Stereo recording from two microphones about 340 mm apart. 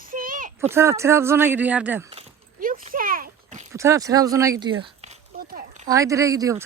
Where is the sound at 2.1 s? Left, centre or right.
Right.